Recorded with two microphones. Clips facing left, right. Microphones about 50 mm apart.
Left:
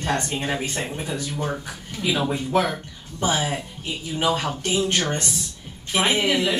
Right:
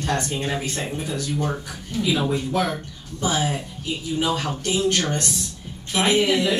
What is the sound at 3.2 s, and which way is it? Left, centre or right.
A man's voice, left.